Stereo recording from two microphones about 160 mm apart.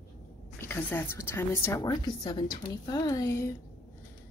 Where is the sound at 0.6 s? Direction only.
10° left (ahead or behind).